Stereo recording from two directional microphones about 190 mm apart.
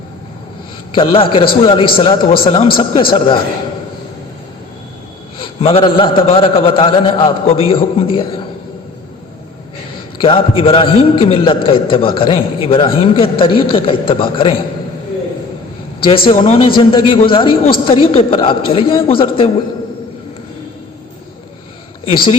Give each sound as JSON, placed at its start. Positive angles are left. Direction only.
{"t": 0.9, "sound": "a man's voice", "side_deg": 30}
{"t": 5.4, "sound": "a man's voice", "side_deg": 30}
{"t": 10.2, "sound": "a man's voice", "side_deg": 30}
{"t": 16.0, "sound": "a man's voice", "side_deg": 30}
{"t": 22.0, "sound": "speech", "side_deg": 30}